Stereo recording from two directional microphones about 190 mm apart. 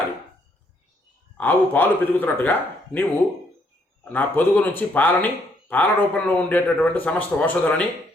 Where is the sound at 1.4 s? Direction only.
10° left (ahead or behind).